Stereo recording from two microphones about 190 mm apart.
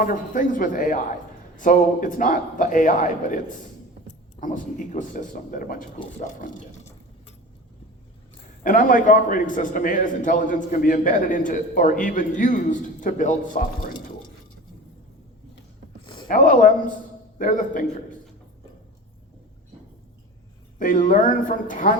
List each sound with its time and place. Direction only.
0.0 s a man's voice: 45° left (ahead or behind)
8.6 s a man's voice: 45° left (ahead or behind)
16.0 s a sound: 25° left (ahead or behind)
16.3 s a man's voice: 45° left (ahead or behind)
20.7 s a man's voice: 45° left (ahead or behind)